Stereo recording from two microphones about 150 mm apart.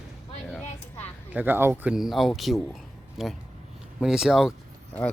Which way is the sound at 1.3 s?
10° right (ahead or behind).